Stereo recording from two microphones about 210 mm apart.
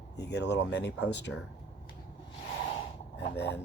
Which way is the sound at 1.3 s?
75° left (ahead or behind).